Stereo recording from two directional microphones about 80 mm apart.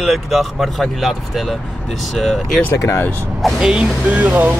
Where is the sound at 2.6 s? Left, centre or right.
Left.